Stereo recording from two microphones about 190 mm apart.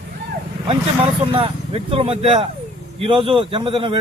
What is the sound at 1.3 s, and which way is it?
A man's voice, 30° right (ahead or behind).